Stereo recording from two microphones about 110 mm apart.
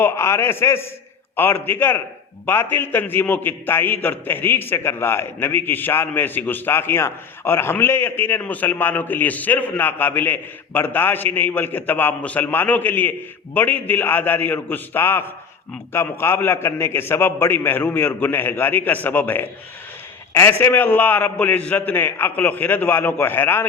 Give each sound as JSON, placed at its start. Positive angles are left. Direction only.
{"t": 0.0, "sound": "a man's voice", "side_deg": 25}
{"t": 20.6, "sound": "a man's voice", "side_deg": 20}